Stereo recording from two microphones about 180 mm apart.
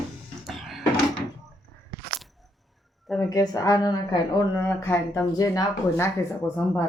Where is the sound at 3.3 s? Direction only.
20° left (ahead or behind).